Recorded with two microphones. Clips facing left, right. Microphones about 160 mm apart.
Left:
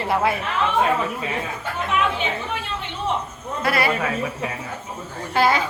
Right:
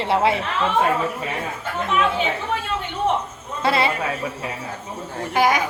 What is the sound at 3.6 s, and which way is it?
Speech, 25° right (ahead or behind).